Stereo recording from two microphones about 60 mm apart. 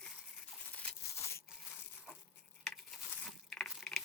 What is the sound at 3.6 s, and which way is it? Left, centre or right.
Crushing, centre.